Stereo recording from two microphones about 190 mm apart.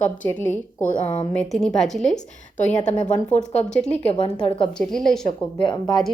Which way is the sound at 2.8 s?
40° left (ahead or behind).